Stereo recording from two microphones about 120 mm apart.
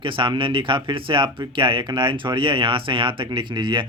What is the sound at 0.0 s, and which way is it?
Speech, 45° right (ahead or behind).